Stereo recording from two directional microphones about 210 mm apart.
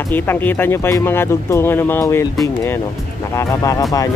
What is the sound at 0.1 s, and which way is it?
Speech, 10° left (ahead or behind).